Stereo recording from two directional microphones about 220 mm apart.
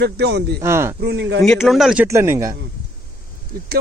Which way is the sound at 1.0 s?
50° right (ahead or behind).